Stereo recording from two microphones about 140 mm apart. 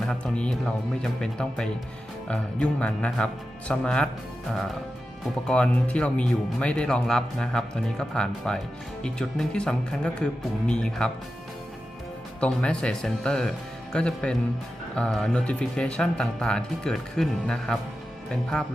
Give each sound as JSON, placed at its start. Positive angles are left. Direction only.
{"t": 0.0, "sound": "speech", "side_deg": 5}
{"t": 5.5, "sound": "speech", "side_deg": 10}
{"t": 12.4, "sound": "speech", "side_deg": 5}